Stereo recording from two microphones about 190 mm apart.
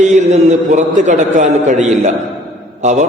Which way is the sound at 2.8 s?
40° right (ahead or behind).